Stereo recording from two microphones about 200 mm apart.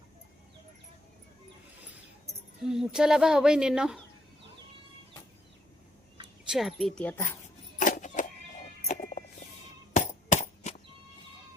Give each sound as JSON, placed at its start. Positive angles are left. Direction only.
{"t": 2.6, "sound": "speech", "side_deg": -5}
{"t": 6.5, "sound": "speech", "side_deg": 0}
{"t": 7.8, "sound": "a sound", "side_deg": 40}
{"t": 8.9, "sound": "music", "side_deg": 45}
{"t": 9.9, "sound": "chop", "side_deg": 35}